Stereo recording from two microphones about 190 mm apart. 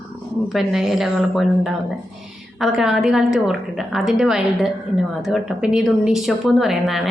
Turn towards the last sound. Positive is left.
turn(degrees=0)  # may be behind; listen again after turning